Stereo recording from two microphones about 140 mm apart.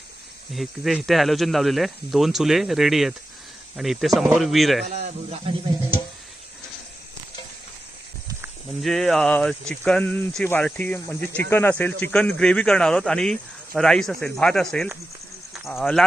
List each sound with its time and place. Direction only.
0.5 s speech: centre (ahead or behind)
4.9 s speech: 55° right (ahead or behind)
8.8 s speech: centre (ahead or behind)